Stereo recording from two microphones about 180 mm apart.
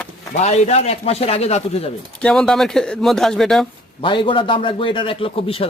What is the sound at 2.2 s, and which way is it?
Speech, 5° left (ahead or behind).